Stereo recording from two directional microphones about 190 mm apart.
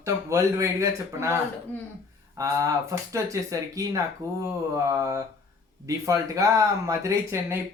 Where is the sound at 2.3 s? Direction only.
15° right (ahead or behind).